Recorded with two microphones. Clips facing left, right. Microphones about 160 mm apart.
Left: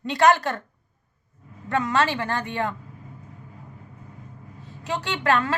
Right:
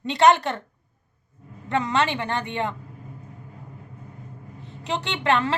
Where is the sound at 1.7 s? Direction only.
20° right (ahead or behind).